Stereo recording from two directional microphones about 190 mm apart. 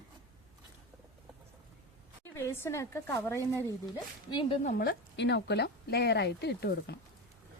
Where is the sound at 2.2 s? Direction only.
15° left (ahead or behind).